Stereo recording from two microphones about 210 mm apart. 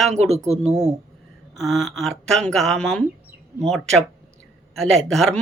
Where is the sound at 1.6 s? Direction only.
Centre (ahead or behind).